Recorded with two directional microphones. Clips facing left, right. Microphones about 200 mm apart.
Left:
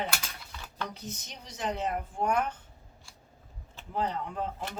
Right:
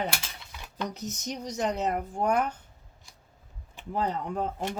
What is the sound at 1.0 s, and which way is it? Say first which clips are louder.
Speech: right 8 dB; 45° right (ahead or behind).